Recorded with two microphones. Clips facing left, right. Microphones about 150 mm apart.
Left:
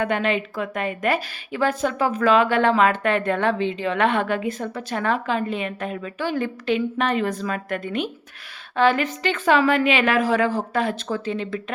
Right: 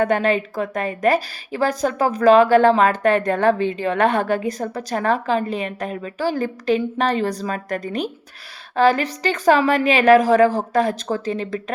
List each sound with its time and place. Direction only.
0.0 s a woman's voice: 40° right (ahead or behind)